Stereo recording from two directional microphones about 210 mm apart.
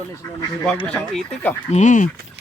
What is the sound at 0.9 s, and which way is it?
Speech, 5° left (ahead or behind).